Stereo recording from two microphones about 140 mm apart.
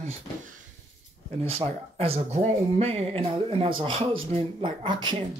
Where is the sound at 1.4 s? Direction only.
45° right (ahead or behind).